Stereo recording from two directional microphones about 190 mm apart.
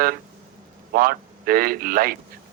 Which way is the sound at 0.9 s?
50° right (ahead or behind).